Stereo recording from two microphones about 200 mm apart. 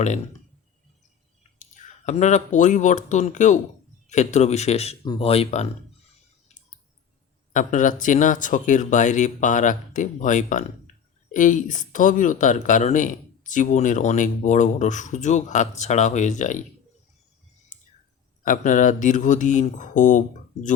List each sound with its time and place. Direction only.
1.5 s speech: 35° left (ahead or behind)
7.5 s speech: 40° left (ahead or behind)
18.4 s speech: 40° left (ahead or behind)